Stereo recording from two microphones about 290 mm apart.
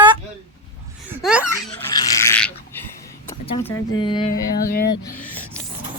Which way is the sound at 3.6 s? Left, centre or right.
Centre.